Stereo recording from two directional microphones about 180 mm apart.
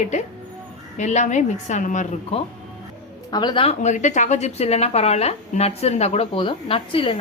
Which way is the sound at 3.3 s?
25° left (ahead or behind).